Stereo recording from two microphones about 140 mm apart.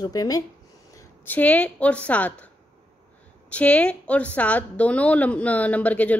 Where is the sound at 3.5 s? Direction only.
10° left (ahead or behind).